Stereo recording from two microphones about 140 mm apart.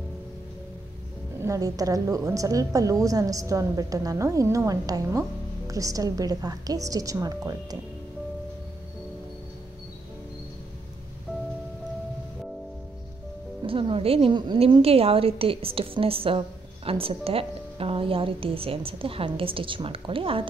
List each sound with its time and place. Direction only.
1.4 s a woman's voice: 25° right (ahead or behind)
13.7 s a woman's voice: 40° right (ahead or behind)